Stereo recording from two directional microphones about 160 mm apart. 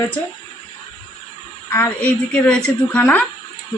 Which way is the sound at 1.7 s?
15° left (ahead or behind).